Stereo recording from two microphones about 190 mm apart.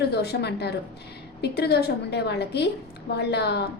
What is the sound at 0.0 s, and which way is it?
A woman's voice, 60° left (ahead or behind).